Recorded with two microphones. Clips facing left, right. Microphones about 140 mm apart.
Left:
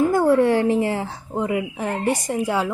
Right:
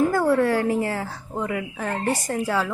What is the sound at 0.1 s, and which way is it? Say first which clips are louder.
Speech: left 3 dB; 20° left (ahead or behind).